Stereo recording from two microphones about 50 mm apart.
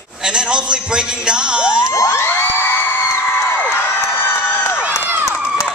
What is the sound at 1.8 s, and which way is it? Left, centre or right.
Children shouting, left.